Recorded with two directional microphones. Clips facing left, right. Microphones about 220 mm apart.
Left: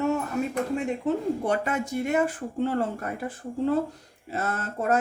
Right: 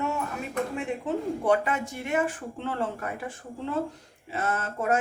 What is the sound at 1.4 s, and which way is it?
Speech, 45° left (ahead or behind).